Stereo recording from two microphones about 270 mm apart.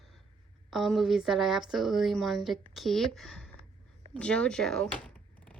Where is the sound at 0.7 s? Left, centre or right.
Centre.